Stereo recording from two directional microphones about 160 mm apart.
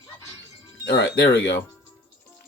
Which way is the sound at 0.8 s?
90° left.